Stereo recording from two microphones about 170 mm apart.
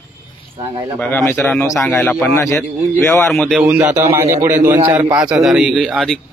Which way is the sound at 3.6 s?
10° right (ahead or behind).